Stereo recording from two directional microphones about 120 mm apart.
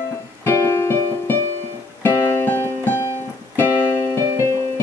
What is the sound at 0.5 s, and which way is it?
Music, 20° left (ahead or behind).